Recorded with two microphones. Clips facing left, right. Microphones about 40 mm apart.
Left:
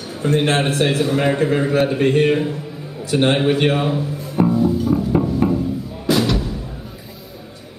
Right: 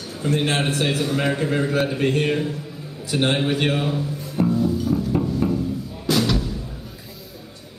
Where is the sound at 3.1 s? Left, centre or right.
Centre.